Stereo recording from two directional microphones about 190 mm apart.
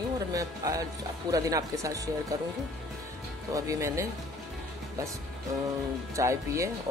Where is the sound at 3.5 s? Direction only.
15° right (ahead or behind).